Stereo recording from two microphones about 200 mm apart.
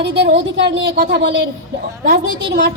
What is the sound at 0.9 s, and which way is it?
Speech, 45° right (ahead or behind).